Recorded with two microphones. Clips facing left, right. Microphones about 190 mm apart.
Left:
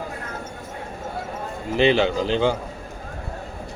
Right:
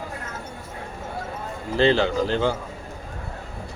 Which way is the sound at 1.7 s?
15° left (ahead or behind).